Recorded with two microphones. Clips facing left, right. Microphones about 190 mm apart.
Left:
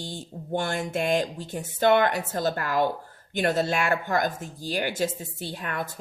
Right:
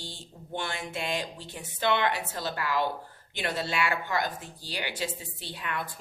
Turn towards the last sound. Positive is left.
turn(degrees=45)  # may be behind; listen again after turning